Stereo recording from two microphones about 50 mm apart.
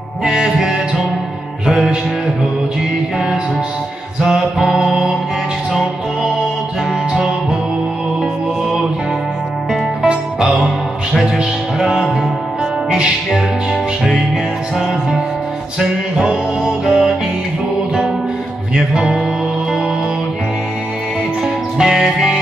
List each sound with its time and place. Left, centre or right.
0.2 s music: centre
4.2 s music: centre
10.0 s music: centre
14.8 s music: centre
18.9 s music: centre
21.7 s music: centre